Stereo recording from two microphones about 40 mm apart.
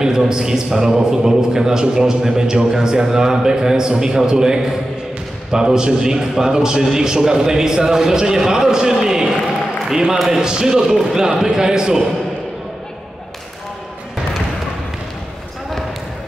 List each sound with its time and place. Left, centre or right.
0.0 s a man's voice: centre